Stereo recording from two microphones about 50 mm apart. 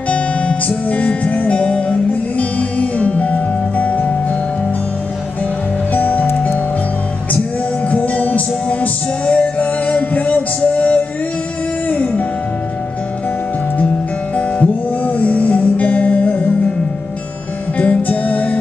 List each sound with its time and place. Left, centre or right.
0.1 s music: left
5.9 s music: left
7.9 s music: left
14.3 s music: left
17.7 s music: left